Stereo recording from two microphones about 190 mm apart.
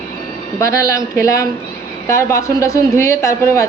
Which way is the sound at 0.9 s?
15° left (ahead or behind).